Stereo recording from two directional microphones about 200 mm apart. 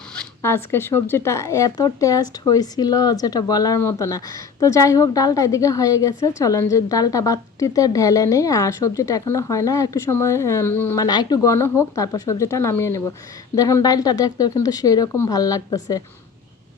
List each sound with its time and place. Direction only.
0.2 s speech: 10° left (ahead or behind)